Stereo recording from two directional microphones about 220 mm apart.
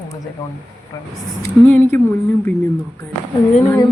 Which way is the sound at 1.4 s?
10° left (ahead or behind).